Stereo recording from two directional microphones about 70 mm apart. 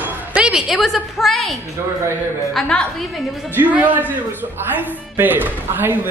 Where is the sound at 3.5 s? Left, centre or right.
Right.